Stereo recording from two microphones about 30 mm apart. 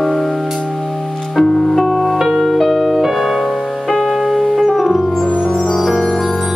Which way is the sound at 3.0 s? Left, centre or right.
Centre.